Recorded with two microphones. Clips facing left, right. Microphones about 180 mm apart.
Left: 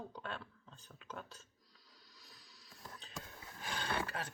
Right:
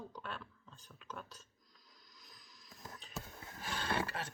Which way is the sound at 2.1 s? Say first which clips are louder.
Right 1 dB; 35° left (ahead or behind).